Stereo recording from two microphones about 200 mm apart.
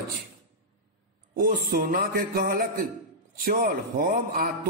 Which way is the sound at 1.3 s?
45° right (ahead or behind).